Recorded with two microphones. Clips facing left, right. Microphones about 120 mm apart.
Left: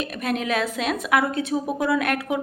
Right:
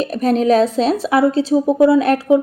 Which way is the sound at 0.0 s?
35° right (ahead or behind).